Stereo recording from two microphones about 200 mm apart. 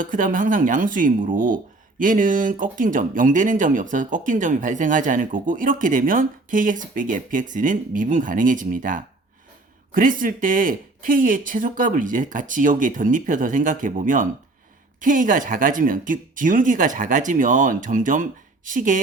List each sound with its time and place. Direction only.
0.0 s speech: 40° right (ahead or behind)